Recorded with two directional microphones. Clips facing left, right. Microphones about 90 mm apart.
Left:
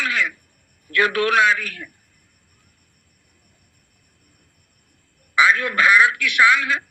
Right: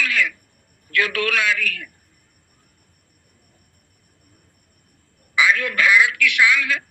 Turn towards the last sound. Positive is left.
turn(degrees=30)  # may be behind; listen again after turning